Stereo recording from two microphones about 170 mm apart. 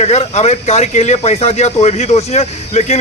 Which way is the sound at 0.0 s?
40° left (ahead or behind).